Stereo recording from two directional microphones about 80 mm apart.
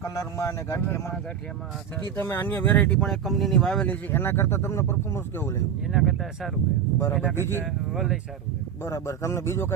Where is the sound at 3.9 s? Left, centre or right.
Left.